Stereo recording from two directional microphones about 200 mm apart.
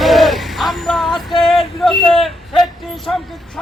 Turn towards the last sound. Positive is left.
turn(degrees=0)  # may be behind; listen again after turning